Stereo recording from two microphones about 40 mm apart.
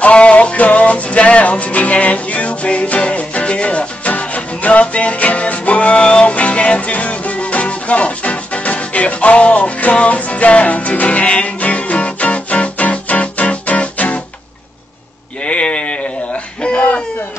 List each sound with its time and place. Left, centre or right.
0.0 s music: left
15.4 s sheep: left